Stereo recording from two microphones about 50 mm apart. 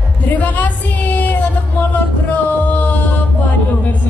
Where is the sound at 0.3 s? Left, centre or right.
Left.